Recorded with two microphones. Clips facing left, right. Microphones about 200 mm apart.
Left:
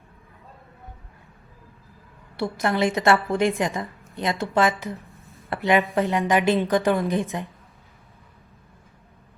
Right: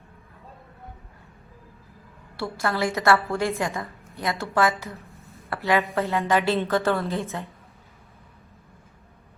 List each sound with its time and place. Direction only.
2.3 s a woman's voice: 20° left (ahead or behind)